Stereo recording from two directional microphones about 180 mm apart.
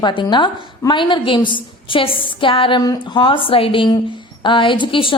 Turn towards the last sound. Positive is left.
turn(degrees=30)  # may be behind; listen again after turning